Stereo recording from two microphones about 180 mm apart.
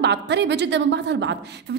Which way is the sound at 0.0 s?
70° right (ahead or behind).